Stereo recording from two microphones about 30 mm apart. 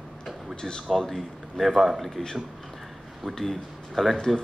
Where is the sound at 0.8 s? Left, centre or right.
Centre.